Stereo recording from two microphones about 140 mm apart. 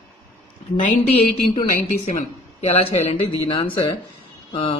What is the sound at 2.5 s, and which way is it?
Speech, 45° left (ahead or behind).